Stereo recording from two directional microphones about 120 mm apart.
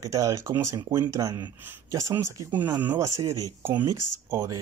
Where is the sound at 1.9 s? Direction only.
25° right (ahead or behind).